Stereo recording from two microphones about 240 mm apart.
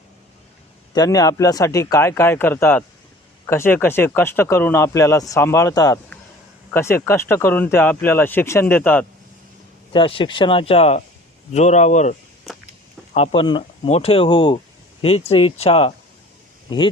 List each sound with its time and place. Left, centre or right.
0.9 s speech: centre
9.9 s speech: left
13.1 s speech: left